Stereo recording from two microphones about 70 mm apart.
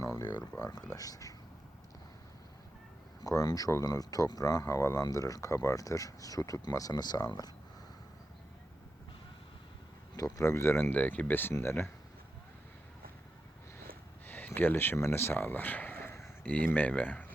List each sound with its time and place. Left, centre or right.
0.0 s a sound: left
0.6 s speech: left
3.2 s speech: left
4.6 s speech: left
5.1 s speech: left
10.2 s speech: left
10.9 s speech: left
14.3 s speech: left
16.4 s speech: left